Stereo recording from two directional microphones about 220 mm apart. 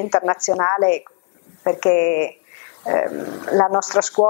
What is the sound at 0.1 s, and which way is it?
Speech, 25° left (ahead or behind).